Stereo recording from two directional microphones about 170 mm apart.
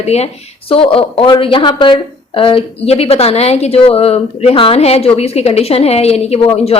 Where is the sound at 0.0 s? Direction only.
40° left (ahead or behind).